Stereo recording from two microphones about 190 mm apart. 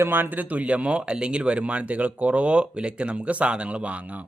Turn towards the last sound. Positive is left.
turn(degrees=-5)  # may be behind; listen again after turning